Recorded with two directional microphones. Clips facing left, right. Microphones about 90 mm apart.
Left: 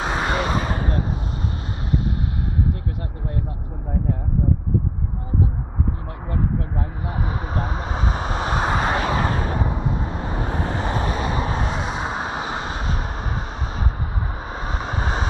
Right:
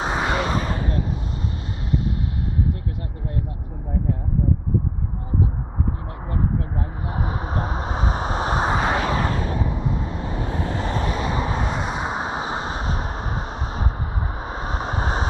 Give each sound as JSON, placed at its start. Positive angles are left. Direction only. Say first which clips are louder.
{"t": 0.0, "sound": "a sound", "louder": "even", "side_deg": -15}
{"t": 0.3, "sound": "a sound", "louder": "even", "side_deg": 10}
{"t": 0.7, "sound": "a sound", "louder": "left 1 dB", "side_deg": 65}
{"t": 7.2, "sound": "vehicle", "louder": "right 1 dB", "side_deg": -20}
{"t": 8.9, "sound": "vehicle", "louder": "even", "side_deg": 5}
{"t": 9.3, "sound": "vehicle", "louder": "left 1 dB", "side_deg": 55}
{"t": 11.1, "sound": "vehicle", "louder": "even", "side_deg": 20}
{"t": 11.4, "sound": "vehicle", "louder": "even", "side_deg": -15}
{"t": 14.4, "sound": "vehicle", "louder": "right 2 dB", "side_deg": -15}
{"t": 14.9, "sound": "vehicle", "louder": "right 1 dB", "side_deg": -25}